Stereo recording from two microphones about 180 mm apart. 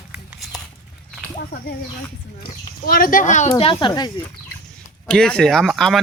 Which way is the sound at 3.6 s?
30° left (ahead or behind).